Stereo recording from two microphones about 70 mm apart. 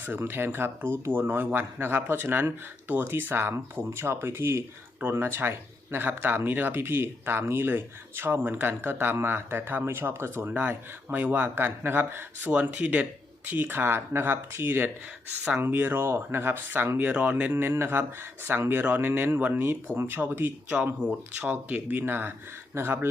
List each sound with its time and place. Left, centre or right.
0.0 s speech: right
10.5 s speech: right
17.6 s speech: right